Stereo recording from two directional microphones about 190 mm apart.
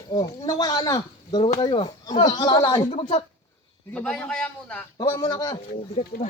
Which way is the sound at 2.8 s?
35° left (ahead or behind).